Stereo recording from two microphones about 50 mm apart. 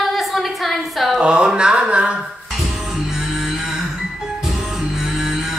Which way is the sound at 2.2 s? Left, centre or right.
Centre.